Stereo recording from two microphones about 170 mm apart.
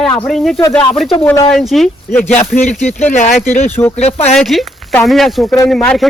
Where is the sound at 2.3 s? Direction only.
45° left (ahead or behind).